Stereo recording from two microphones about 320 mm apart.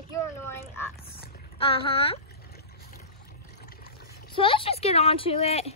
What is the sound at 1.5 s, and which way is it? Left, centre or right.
Speech, centre.